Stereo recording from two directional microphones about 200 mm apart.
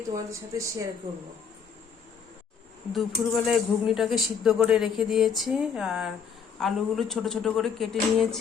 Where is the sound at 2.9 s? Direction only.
Centre (ahead or behind).